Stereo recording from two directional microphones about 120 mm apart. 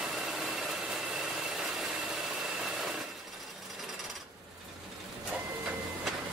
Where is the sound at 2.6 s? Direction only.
Centre (ahead or behind).